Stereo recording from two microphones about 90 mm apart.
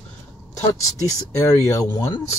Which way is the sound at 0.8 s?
40° left (ahead or behind).